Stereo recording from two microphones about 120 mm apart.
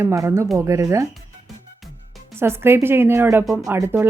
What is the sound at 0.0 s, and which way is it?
Speech, 20° right (ahead or behind).